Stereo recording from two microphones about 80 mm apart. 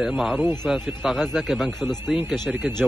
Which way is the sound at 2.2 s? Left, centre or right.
Right.